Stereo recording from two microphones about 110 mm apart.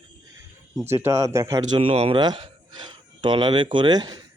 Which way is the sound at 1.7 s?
60° right (ahead or behind).